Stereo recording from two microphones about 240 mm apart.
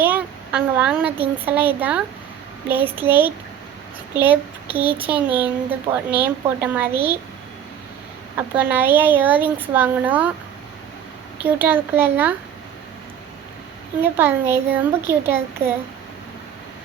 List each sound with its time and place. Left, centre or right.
0.0 s a child's voice: centre
8.4 s speech: centre
11.4 s speech: centre
14.0 s speech: centre
15.6 s a child's voice: right